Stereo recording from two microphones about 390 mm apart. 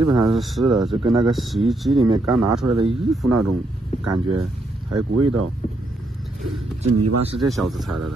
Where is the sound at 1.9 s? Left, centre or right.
Centre.